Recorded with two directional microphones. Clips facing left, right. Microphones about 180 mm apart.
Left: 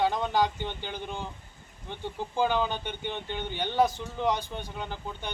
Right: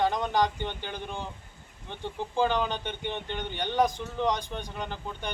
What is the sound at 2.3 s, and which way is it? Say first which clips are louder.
Speech: even; 10° left (ahead or behind).